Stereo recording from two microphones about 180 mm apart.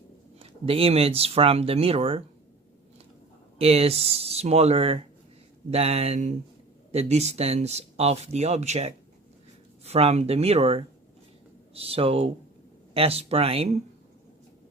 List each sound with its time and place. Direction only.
0.3 s speech: 30° right (ahead or behind)
3.6 s speech: 35° right (ahead or behind)